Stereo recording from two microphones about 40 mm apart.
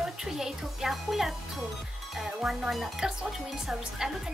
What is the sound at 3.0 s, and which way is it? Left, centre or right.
Speech, centre.